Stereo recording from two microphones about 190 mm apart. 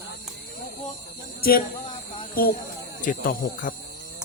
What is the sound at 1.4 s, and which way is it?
Speech, 50° left (ahead or behind).